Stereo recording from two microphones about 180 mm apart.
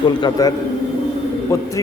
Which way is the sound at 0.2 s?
20° left (ahead or behind).